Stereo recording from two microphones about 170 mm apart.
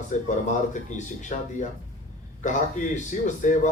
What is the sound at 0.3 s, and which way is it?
A man's voice, 45° left (ahead or behind).